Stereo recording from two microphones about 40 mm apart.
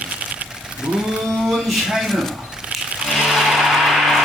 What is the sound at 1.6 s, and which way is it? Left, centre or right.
Speech, centre.